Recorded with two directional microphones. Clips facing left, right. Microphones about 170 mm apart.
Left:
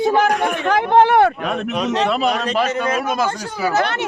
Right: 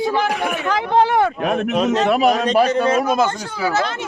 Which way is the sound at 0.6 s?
60° left (ahead or behind).